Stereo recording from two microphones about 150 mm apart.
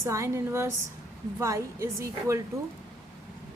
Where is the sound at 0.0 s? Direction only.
20° right (ahead or behind).